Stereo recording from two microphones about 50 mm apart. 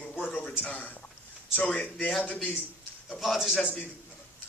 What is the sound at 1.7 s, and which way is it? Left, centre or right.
Speech, centre.